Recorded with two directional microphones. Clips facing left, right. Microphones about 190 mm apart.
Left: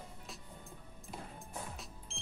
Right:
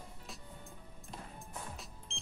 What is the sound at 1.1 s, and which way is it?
Music, centre (ahead or behind).